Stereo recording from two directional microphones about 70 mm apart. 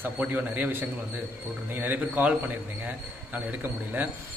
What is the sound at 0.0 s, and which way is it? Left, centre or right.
A man's voice, right.